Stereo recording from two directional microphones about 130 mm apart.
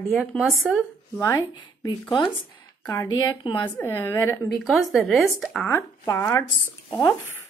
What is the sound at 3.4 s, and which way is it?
Speech, 40° left (ahead or behind).